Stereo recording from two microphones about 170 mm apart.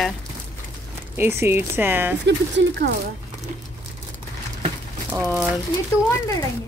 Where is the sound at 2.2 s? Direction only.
90° right.